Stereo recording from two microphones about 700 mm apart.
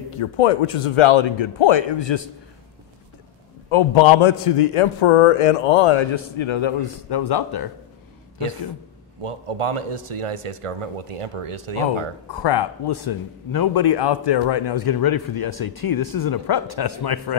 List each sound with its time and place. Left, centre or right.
0.2 s speech: left
3.7 s a man's voice: left
9.2 s a man's voice: right
12.4 s a man's voice: left